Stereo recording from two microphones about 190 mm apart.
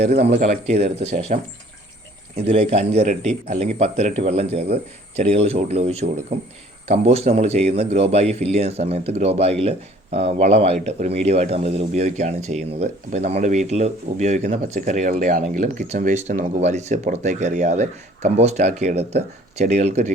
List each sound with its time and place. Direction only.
0.0 s speech: 35° right (ahead or behind)
2.4 s speech: 30° right (ahead or behind)